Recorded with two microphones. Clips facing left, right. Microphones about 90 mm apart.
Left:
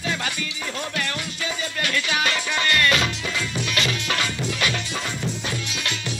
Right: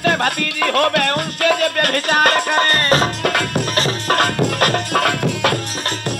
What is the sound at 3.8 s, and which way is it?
Music, 40° right (ahead or behind).